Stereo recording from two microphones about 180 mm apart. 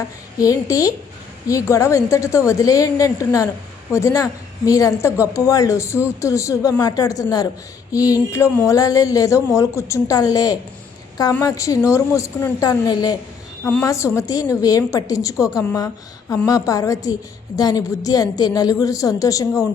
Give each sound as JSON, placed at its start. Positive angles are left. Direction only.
{"t": 0.3, "sound": "a woman's voice", "side_deg": 20}